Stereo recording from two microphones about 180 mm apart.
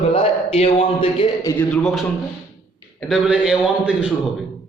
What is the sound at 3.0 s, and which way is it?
A man's voice, centre (ahead or behind).